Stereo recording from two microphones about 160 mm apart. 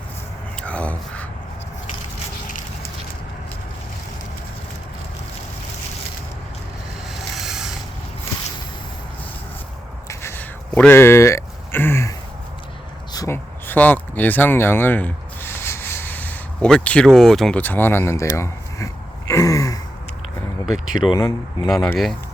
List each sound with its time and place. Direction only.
0.6 s a sound: 10° left (ahead or behind)
7.1 s boat: centre (ahead or behind)
10.1 s a sound: 15° left (ahead or behind)
13.1 s a sound: 15° left (ahead or behind)
17.2 s speech: centre (ahead or behind)
19.3 s gasp: 20° left (ahead or behind)
20.7 s speech: centre (ahead or behind)
21.1 s speech: 25° left (ahead or behind)
21.7 s speech: 10° left (ahead or behind)